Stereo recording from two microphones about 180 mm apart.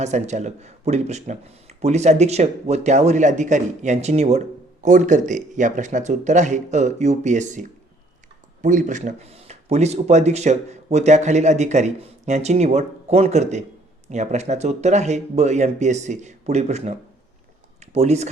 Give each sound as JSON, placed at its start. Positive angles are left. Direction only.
{"t": 0.0, "sound": "speech", "side_deg": -40}
{"t": 8.6, "sound": "speech", "side_deg": -45}